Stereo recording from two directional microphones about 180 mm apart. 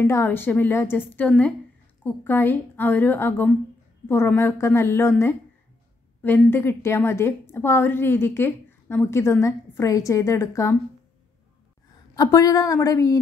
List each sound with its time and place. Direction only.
0.0 s a woman's voice: 15° left (ahead or behind)
6.2 s a woman's voice: 10° left (ahead or behind)
12.2 s a woman's voice: 20° left (ahead or behind)